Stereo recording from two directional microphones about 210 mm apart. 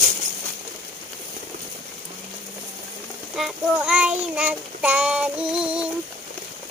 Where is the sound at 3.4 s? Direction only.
5° right (ahead or behind).